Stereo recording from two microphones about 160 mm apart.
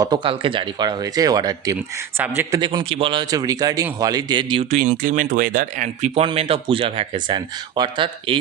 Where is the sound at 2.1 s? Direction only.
15° right (ahead or behind).